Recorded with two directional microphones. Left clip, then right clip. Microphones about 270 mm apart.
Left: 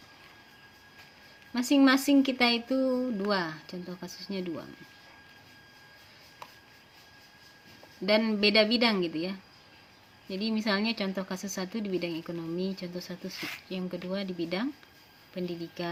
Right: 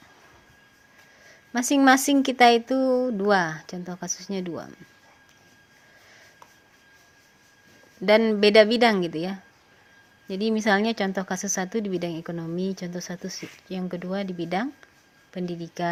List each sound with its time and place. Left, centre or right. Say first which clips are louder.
1.5 s a woman's voice: right 5 dB; right
8.0 s a woman's voice: right 7 dB; right